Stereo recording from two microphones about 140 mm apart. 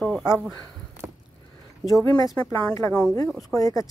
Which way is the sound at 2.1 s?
25° left (ahead or behind).